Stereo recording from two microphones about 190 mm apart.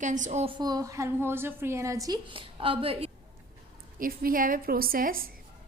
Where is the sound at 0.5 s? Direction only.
20° right (ahead or behind).